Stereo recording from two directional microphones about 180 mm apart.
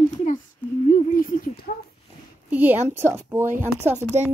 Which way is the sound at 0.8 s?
45° left (ahead or behind).